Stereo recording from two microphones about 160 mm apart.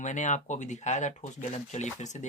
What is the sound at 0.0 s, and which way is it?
Speech, 50° left (ahead or behind).